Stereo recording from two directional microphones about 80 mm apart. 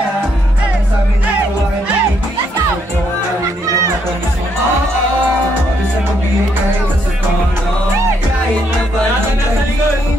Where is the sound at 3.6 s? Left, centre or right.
Right.